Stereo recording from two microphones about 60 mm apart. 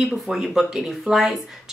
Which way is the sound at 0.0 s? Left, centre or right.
Centre.